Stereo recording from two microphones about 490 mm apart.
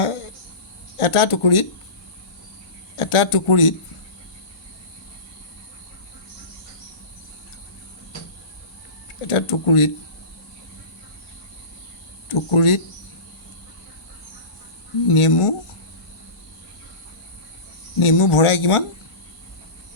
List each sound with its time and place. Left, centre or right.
0.9 s speech: left
2.9 s speech: left
9.2 s speech: left
12.3 s speech: left
15.0 s speech: left
18.0 s speech: left